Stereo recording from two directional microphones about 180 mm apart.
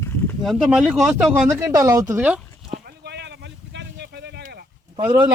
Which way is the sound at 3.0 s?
70° right (ahead or behind).